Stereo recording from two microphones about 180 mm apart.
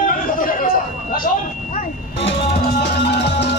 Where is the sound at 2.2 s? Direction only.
75° left (ahead or behind).